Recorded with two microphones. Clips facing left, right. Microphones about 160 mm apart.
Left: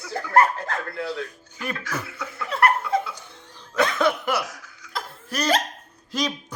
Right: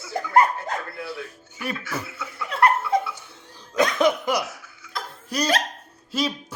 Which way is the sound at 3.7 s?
15° right (ahead or behind).